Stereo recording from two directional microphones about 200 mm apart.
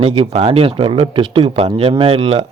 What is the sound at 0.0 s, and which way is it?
Speech, 25° right (ahead or behind).